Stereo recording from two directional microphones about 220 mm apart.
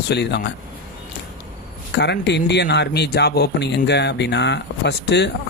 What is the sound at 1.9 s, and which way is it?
Speech, 50° left (ahead or behind).